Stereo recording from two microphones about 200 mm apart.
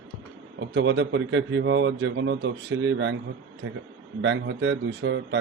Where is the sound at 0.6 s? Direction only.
65° right (ahead or behind).